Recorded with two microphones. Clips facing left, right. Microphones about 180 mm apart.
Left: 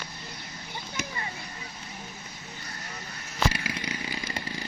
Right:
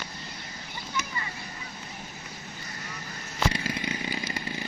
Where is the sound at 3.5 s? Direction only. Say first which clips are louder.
Right 3 dB; 25° right (ahead or behind).